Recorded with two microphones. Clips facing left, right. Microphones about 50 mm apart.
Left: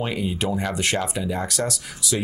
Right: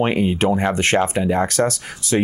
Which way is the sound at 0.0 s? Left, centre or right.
Right.